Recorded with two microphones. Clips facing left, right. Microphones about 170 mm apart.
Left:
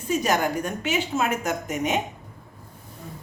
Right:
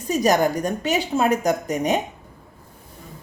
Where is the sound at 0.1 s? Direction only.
40° right (ahead or behind).